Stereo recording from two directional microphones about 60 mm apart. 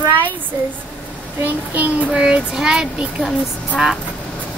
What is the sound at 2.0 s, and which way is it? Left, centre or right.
A child's voice, centre.